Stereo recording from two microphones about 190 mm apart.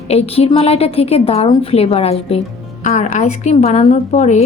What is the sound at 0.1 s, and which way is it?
A woman's voice, 30° left (ahead or behind).